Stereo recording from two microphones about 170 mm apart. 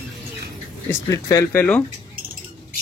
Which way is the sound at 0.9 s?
20° left (ahead or behind).